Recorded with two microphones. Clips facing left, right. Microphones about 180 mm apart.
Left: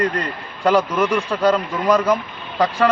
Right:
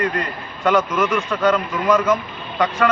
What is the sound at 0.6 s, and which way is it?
A man's voice, 35° left (ahead or behind).